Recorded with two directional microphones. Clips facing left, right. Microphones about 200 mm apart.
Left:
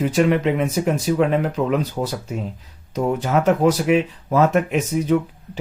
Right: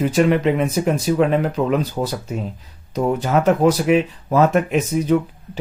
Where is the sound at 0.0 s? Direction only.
35° right (ahead or behind).